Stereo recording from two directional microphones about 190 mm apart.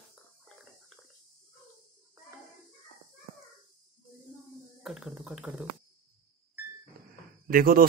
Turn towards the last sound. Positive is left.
turn(degrees=-50)  # may be behind; listen again after turning